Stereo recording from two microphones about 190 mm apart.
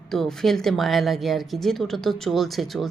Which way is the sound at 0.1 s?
Centre (ahead or behind).